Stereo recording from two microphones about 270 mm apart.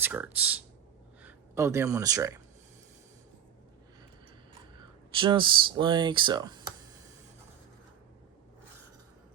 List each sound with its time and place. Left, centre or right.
0.0 s speech: centre
5.1 s speech: centre